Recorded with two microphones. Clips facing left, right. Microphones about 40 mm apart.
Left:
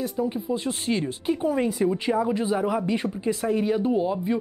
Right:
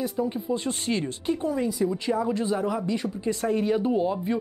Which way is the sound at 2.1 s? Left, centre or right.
Centre.